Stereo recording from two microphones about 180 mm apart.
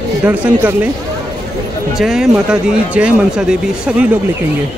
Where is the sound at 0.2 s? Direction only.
10° right (ahead or behind).